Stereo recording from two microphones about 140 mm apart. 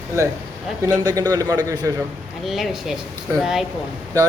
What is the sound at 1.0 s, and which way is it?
Speech, 25° right (ahead or behind).